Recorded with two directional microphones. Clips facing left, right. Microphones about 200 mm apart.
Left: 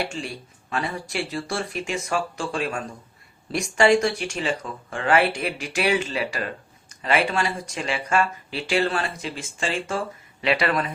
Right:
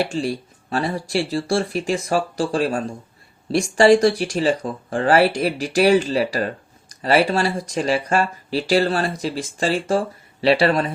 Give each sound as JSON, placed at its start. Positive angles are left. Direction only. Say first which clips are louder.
{"t": 0.0, "sound": "speech", "louder": "right 7 dB", "side_deg": -40}